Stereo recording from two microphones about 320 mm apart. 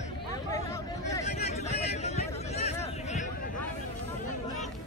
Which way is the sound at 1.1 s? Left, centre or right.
Centre.